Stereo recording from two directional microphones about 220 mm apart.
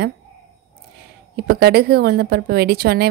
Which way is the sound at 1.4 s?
45° right (ahead or behind).